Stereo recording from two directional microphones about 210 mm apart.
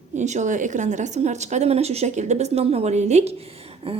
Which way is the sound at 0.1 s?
35° right (ahead or behind).